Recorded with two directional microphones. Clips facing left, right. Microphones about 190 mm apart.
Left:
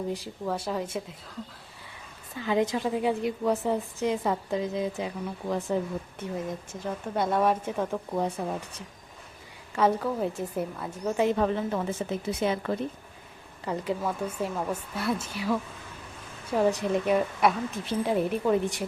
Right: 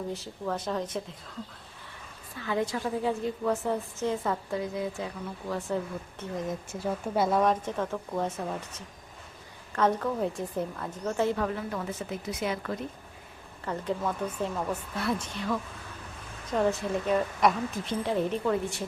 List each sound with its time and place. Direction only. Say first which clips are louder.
0.1 s a woman's voice: left 2 dB; 10° left (ahead or behind)
2.4 s a woman's voice: left 4 dB; 20° left (ahead or behind)
6.7 s speech: right 2 dB; 10° right (ahead or behind); by 8.3 s 15° left (ahead or behind)
9.7 s a woman's voice: left 1 dB; 5° left (ahead or behind); by 12.8 s 25° left (ahead or behind)
13.7 s a woman's voice: left 1 dB; 10° left (ahead or behind)